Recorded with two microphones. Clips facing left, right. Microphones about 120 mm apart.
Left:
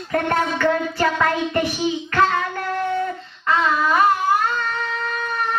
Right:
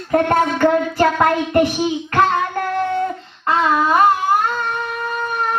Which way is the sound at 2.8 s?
30° right (ahead or behind).